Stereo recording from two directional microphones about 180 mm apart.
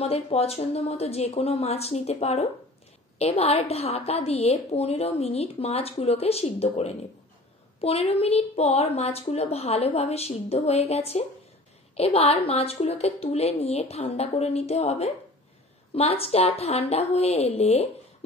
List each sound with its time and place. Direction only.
0.0 s a woman's voice: 35° left (ahead or behind)